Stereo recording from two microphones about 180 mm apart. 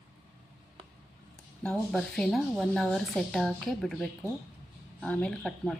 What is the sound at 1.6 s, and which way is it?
Speech, 5° left (ahead or behind).